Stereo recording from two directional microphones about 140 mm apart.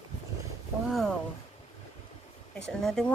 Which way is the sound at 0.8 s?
Centre (ahead or behind).